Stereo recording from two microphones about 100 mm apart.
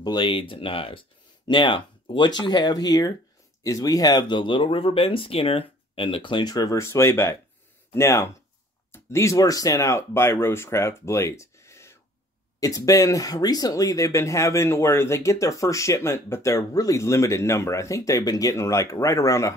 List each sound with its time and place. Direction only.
0.0 s speech: 50° left (ahead or behind); by 19.5 s 30° left (ahead or behind)